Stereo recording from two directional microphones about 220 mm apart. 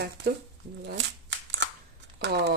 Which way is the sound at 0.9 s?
55° right (ahead or behind).